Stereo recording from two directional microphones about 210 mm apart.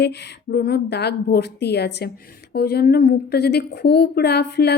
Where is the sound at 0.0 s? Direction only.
50° left (ahead or behind).